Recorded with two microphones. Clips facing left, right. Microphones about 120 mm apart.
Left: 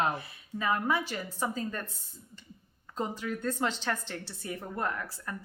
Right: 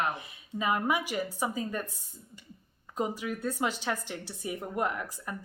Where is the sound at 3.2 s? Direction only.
10° right (ahead or behind).